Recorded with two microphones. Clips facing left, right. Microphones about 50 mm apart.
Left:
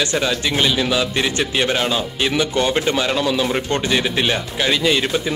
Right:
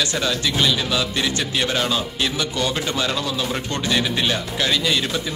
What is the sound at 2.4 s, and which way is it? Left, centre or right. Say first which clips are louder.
Speech: left 8 dB; left.